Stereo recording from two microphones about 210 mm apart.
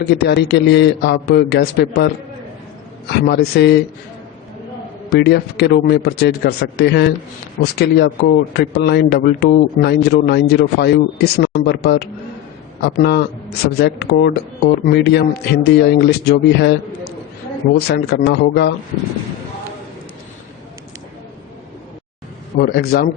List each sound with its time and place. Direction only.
0.0 s a man's voice: 50° left (ahead or behind)
3.1 s a man's voice: 50° left (ahead or behind)
5.1 s a man's voice: 50° left (ahead or behind)
22.5 s a man's voice: 45° left (ahead or behind)